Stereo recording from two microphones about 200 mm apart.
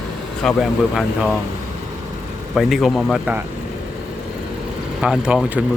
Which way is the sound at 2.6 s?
Centre (ahead or behind).